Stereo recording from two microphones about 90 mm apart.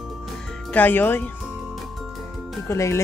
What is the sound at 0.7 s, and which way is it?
Speech, 20° left (ahead or behind).